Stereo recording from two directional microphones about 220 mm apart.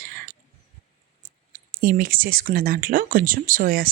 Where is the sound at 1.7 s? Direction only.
40° right (ahead or behind).